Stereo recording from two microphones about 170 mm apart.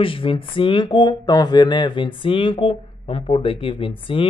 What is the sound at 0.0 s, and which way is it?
Speech, 30° left (ahead or behind).